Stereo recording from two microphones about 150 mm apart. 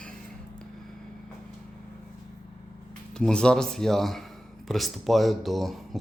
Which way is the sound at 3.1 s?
5° left (ahead or behind).